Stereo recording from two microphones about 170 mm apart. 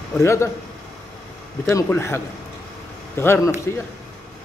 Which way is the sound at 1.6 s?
15° left (ahead or behind).